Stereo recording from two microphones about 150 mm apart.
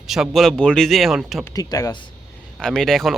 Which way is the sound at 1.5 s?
25° left (ahead or behind).